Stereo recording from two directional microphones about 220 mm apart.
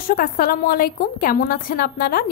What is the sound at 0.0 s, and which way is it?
A woman's voice, 40° left (ahead or behind).